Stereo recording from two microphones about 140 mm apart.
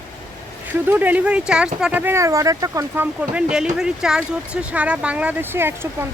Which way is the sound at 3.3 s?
5° right (ahead or behind).